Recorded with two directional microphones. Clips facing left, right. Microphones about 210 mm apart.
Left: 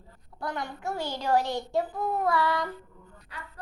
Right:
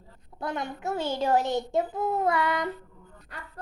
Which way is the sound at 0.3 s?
20° right (ahead or behind).